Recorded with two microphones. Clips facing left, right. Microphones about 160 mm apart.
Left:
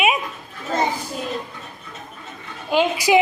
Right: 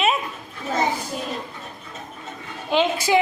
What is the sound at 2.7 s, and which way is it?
Speech, 10° left (ahead or behind).